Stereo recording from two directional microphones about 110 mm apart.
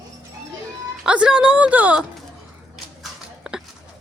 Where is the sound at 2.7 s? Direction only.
5° right (ahead or behind).